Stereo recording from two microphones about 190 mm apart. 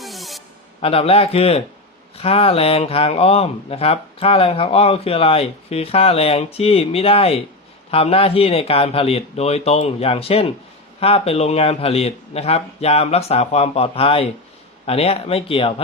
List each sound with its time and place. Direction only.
0.0 s music: centre (ahead or behind)
0.8 s speech: 30° left (ahead or behind)